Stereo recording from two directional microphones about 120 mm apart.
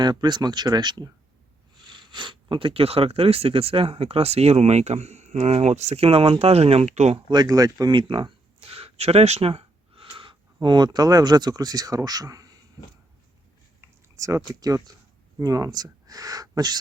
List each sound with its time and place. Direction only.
0.0 s speech: 35° right (ahead or behind); by 7.2 s 65° right (ahead or behind)
7.3 s speech: 35° right (ahead or behind)
13.8 s speech: 25° right (ahead or behind)